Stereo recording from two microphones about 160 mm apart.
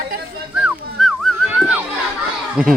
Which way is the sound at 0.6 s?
5° right (ahead or behind).